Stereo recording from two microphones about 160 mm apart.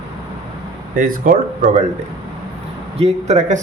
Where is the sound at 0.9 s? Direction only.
60° right (ahead or behind).